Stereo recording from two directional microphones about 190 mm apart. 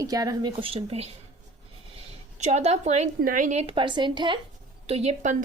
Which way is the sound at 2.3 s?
35° right (ahead or behind).